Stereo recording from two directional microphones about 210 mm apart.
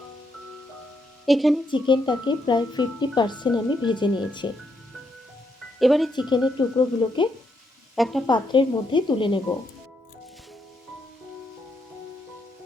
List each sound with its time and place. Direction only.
1.2 s speech: centre (ahead or behind)
1.6 s speech: 20° left (ahead or behind)
5.8 s speech: centre (ahead or behind)
6.3 s speech: 20° left (ahead or behind)
7.9 s speech: centre (ahead or behind)
8.3 s speech: 20° left (ahead or behind)